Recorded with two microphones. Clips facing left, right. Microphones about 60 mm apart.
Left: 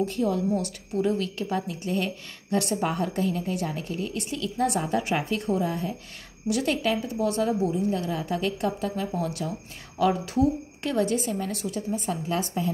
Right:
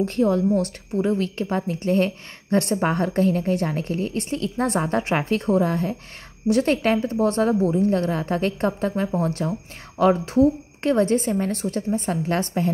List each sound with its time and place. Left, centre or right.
0.0 s a woman's voice: right
0.6 s a woman's voice: right